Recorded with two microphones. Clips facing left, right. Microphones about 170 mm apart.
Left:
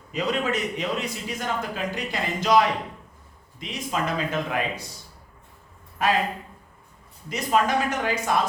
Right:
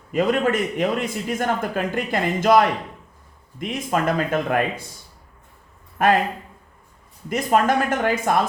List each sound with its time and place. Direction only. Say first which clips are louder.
0.1 s a man's voice: right 6 dB; 50° right (ahead or behind)
6.0 s a man's voice: right 6 dB; 55° right (ahead or behind)
7.3 s a man's voice: right 4 dB; 50° right (ahead or behind)